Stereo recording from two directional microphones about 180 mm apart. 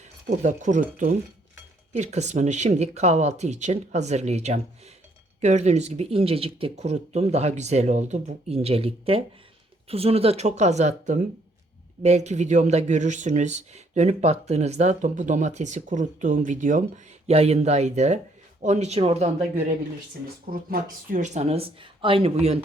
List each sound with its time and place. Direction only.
0.3 s speech: 45° right (ahead or behind)
20.5 s speech: 55° right (ahead or behind); by 22.5 s 35° right (ahead or behind)